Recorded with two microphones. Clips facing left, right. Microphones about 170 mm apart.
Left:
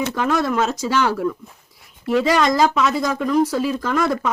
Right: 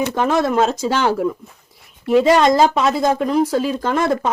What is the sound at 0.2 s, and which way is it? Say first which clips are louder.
Speech: right 3 dB; 25° right (ahead or behind).